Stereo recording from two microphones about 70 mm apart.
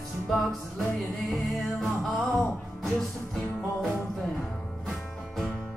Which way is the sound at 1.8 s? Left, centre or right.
Centre.